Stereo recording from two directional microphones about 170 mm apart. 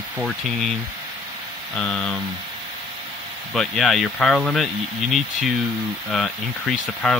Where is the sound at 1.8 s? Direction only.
5° left (ahead or behind).